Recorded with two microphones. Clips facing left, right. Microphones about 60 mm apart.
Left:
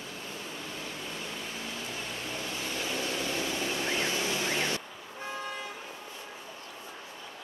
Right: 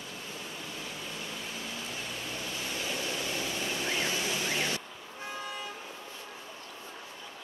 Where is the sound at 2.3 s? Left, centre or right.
Left.